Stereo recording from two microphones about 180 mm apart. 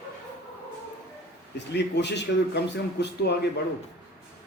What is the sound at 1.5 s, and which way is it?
A man's voice, 70° left (ahead or behind).